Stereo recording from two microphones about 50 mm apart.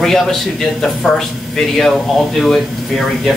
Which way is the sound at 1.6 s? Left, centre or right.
Centre.